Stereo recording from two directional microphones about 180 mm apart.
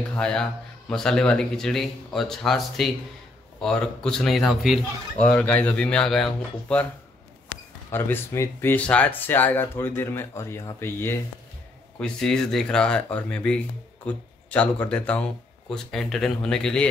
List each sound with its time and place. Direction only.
0.1 s speech: 5° left (ahead or behind)
7.9 s speech: 15° left (ahead or behind)